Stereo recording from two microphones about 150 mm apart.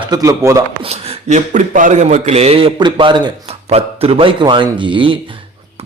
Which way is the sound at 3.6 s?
40° right (ahead or behind).